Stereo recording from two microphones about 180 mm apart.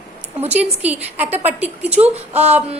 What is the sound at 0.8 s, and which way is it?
A woman's voice, 10° right (ahead or behind).